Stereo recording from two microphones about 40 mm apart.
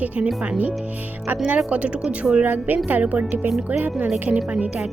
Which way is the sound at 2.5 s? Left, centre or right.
Right.